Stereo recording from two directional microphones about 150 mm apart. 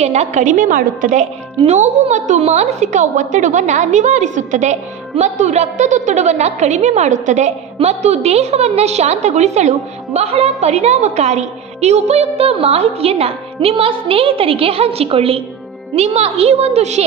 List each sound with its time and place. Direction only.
0.0 s a woman's voice: 45° right (ahead or behind); by 1.2 s 65° right (ahead or behind)
1.7 s a woman's voice: 50° right (ahead or behind)